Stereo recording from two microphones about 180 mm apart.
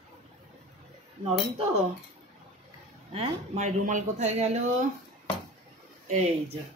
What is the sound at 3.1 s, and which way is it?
Speech, 40° right (ahead or behind).